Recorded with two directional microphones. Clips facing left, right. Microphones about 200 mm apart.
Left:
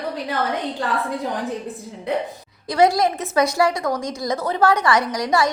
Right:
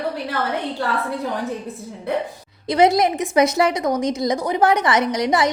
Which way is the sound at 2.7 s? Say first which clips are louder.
Right 1 dB; 20° right (ahead or behind).